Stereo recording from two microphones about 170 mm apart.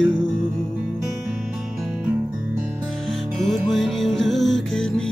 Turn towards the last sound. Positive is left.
turn(degrees=5)  # may be behind; listen again after turning